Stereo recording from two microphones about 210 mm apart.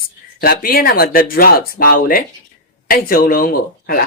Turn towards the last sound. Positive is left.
turn(degrees=45)  # may be behind; listen again after turning